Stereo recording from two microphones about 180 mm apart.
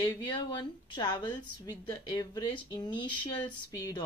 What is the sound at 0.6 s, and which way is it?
Speech, 25° left (ahead or behind).